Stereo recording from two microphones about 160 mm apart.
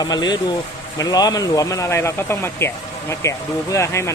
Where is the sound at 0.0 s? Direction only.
25° left (ahead or behind).